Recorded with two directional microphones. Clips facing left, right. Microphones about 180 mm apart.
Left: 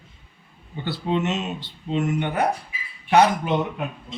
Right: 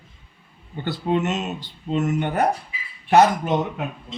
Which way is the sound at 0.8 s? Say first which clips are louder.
Right 2 dB; 45° right (ahead or behind).